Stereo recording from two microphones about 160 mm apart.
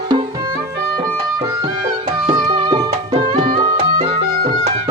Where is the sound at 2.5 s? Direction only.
30° right (ahead or behind).